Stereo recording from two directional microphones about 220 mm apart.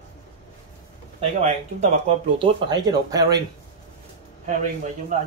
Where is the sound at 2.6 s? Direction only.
15° right (ahead or behind).